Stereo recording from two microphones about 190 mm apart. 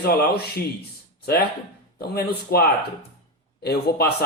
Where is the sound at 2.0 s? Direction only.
55° left (ahead or behind).